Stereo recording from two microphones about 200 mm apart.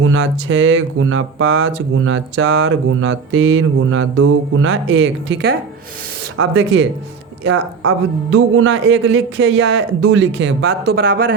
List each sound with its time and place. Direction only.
0.0 s speech: 90° right; by 5.5 s 55° right (ahead or behind)
6.3 s a man's voice: 90° right; by 11.3 s 50° right (ahead or behind)